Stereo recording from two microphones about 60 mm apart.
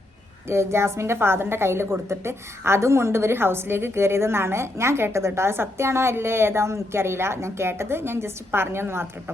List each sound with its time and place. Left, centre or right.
0.4 s a woman's voice: right